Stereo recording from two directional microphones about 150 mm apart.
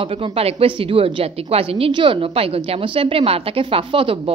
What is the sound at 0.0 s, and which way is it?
A woman's voice, 40° right (ahead or behind).